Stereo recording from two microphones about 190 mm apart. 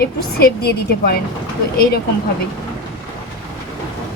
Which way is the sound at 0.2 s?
55° left (ahead or behind).